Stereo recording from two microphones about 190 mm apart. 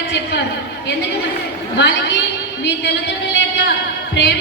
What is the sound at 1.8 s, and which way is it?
Speech, 65° left (ahead or behind).